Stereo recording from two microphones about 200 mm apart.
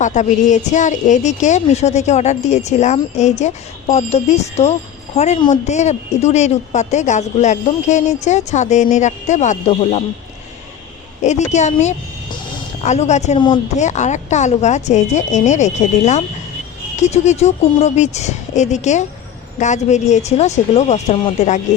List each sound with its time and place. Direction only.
0.0 s a woman's voice: 35° left (ahead or behind)
11.2 s a woman's voice: 35° left (ahead or behind)